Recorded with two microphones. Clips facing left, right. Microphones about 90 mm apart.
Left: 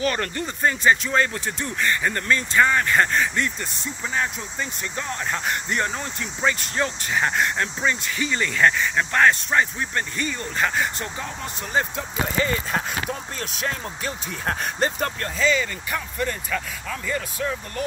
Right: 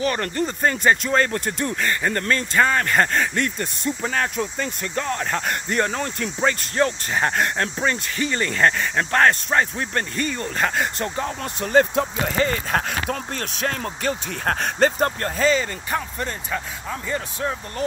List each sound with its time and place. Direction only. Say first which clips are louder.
0.0 s speech: right 2 dB; 30° right (ahead or behind); by 1.9 s 50° right (ahead or behind)
1.9 s speech: left 1 dB; 40° right (ahead or behind)
15.0 s speech: right 4 dB; 40° right (ahead or behind)